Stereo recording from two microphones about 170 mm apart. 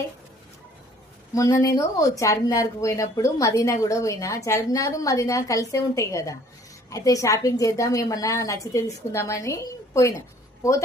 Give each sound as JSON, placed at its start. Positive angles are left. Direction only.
{"t": 1.3, "sound": "a woman's voice", "side_deg": 20}